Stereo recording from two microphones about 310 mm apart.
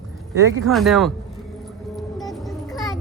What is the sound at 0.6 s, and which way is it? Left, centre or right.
Speech, centre.